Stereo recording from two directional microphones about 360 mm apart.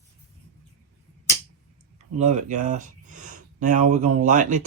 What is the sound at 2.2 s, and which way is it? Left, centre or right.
Speech, centre.